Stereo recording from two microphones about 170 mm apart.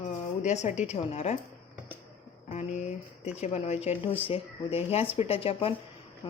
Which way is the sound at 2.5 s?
40° left (ahead or behind).